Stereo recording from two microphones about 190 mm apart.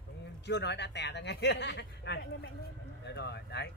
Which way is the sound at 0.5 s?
65° left (ahead or behind).